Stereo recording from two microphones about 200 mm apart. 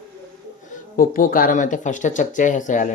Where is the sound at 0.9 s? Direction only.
45° left (ahead or behind).